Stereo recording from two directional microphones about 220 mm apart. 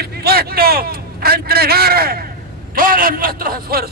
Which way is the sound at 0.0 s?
45° right (ahead or behind).